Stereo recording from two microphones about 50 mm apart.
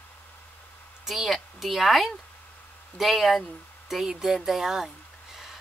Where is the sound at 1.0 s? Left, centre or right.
Centre.